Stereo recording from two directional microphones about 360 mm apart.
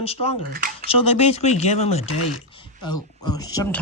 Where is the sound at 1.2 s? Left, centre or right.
Centre.